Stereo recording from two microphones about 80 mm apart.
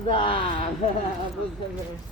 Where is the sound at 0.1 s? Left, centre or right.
Left.